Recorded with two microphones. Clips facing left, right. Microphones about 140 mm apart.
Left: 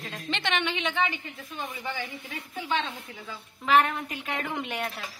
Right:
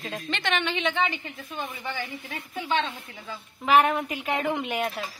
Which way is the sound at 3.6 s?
10° right (ahead or behind).